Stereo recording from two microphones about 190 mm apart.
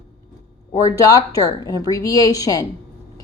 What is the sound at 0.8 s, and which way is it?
Speech, 20° left (ahead or behind).